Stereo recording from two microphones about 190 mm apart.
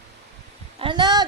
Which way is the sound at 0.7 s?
25° right (ahead or behind).